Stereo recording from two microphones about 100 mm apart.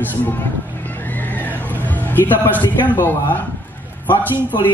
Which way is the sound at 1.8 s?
20° left (ahead or behind).